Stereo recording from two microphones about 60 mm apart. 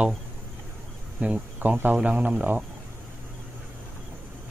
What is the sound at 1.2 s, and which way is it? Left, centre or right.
Speech, right.